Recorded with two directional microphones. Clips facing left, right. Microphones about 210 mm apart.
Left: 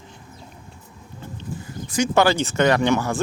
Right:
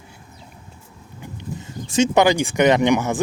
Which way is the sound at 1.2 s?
15° right (ahead or behind).